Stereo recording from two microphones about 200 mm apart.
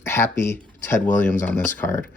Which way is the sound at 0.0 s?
10° left (ahead or behind).